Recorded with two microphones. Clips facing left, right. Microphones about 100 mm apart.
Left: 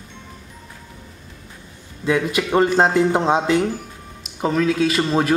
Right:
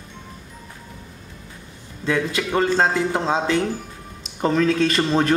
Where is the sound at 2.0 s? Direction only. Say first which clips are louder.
Left 3 dB; 15° left (ahead or behind).